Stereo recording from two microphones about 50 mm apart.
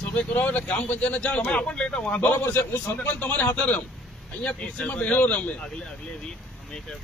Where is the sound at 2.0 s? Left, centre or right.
Left.